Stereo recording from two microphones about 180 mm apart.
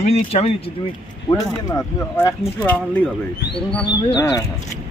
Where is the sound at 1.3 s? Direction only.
15° left (ahead or behind).